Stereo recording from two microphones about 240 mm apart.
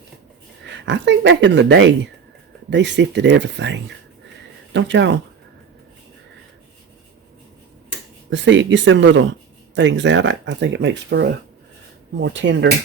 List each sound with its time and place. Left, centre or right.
0.7 s speech: right
8.3 s speech: right